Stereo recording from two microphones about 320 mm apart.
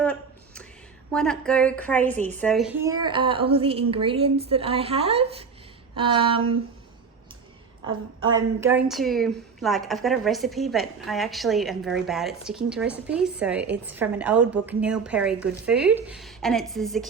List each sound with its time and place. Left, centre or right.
0.0 s a sound: centre
1.1 s a woman's voice: centre
8.6 s a woman's voice: centre